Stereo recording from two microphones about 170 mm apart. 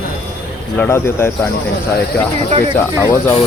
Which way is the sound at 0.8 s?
15° left (ahead or behind).